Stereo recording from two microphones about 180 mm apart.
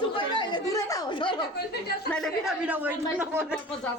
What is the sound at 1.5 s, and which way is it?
Speech, 60° left (ahead or behind).